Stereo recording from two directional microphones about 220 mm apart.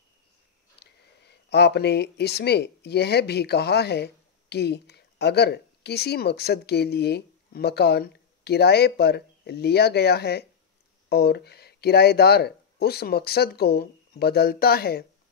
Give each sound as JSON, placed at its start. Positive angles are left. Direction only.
{"t": 0.7, "sound": "speech", "side_deg": 50}